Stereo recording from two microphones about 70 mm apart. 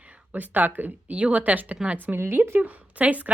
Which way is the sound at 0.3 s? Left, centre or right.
Right.